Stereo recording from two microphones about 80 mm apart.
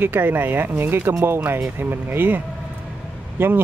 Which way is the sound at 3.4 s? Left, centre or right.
Right.